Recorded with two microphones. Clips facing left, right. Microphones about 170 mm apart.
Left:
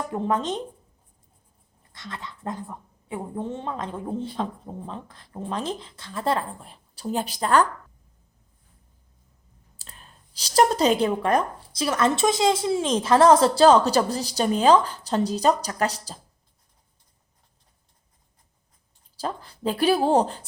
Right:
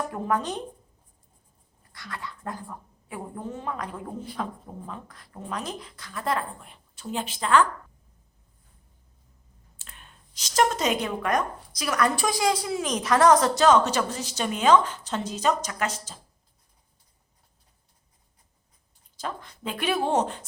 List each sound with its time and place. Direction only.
0.1 s a woman's voice: 25° left (ahead or behind)
1.9 s a woman's voice: 25° left (ahead or behind); by 7.7 s 40° left (ahead or behind)
9.7 s speech: 35° left (ahead or behind)
19.1 s speech: 35° left (ahead or behind)